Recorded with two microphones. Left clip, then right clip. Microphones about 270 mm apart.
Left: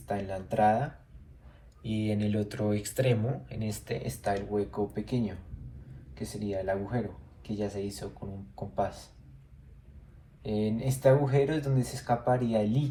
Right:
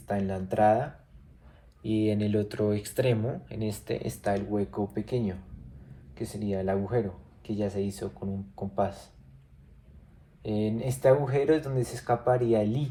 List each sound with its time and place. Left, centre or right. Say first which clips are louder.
0.1 s speech: right 2 dB; right
1.8 s speech: right 5 dB; centre; by 9.0 s right
10.4 s speech: right 1 dB; right